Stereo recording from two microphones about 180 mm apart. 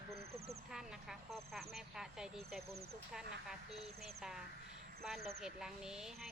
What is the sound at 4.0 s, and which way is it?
Speech, centre (ahead or behind).